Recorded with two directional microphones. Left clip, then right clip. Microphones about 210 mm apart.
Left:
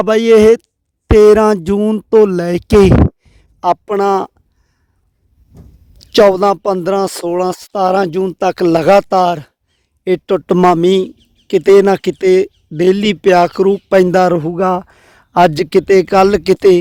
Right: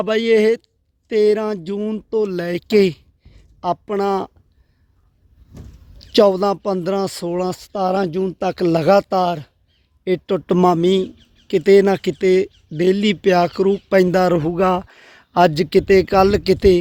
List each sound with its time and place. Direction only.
0.0 s speech: 25° left (ahead or behind)
6.1 s speech: 35° left (ahead or behind)
14.3 s speech: 15° left (ahead or behind); by 16.7 s 30° left (ahead or behind)